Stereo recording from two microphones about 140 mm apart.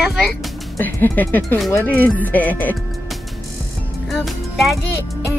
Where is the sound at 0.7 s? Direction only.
15° left (ahead or behind).